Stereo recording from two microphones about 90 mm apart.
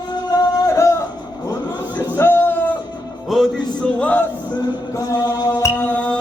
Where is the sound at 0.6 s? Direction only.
35° left (ahead or behind).